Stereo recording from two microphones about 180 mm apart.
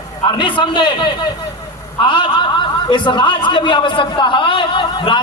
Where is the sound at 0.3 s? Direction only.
25° left (ahead or behind).